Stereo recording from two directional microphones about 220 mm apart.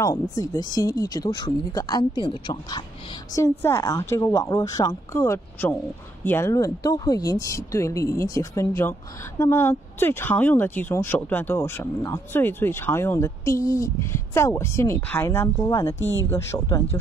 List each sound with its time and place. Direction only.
0.0 s speech: 15° left (ahead or behind)